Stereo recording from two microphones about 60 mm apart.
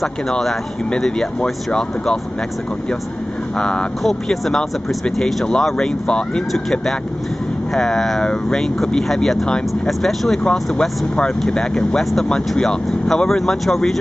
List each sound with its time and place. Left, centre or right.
0.0 s speech: centre
3.5 s speech: centre